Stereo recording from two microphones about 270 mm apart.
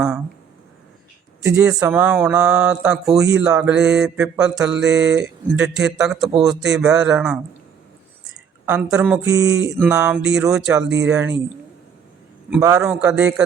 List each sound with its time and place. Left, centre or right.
1.5 s mantra: centre
8.6 s speech: centre
9.7 s mantra: centre
10.8 s speech: right
11.1 s mantra: centre
12.6 s mantra: centre